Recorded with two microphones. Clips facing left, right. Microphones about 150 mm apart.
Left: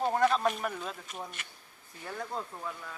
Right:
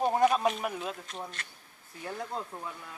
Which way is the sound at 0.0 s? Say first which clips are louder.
Right 2 dB; 15° right (ahead or behind).